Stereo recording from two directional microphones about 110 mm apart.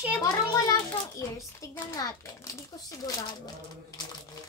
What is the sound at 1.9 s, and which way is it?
Speech, 30° left (ahead or behind).